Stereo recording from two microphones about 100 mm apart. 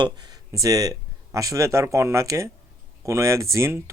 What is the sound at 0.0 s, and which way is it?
Speech, 45° right (ahead or behind).